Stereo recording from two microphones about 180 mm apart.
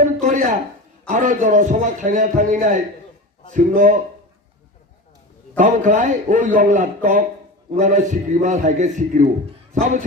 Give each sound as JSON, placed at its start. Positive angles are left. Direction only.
{"t": 0.0, "sound": "a sound", "side_deg": -45}
{"t": 1.0, "sound": "a man's voice", "side_deg": -45}
{"t": 5.5, "sound": "a man's voice", "side_deg": -45}